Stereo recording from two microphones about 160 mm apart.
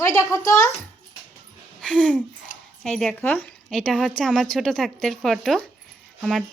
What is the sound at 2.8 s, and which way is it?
A child's voice, 5° left (ahead or behind).